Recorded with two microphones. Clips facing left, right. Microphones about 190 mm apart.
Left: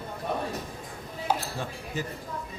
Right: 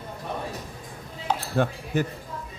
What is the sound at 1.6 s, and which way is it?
Speech, 65° right (ahead or behind).